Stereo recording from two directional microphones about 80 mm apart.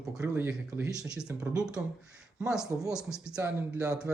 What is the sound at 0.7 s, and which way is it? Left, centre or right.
Speech, right.